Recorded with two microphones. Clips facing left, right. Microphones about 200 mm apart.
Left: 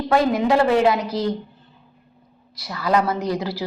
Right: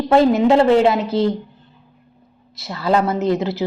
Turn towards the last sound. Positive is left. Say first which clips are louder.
# right 5 dB
turn(degrees=-25)  # may be behind; listen again after turning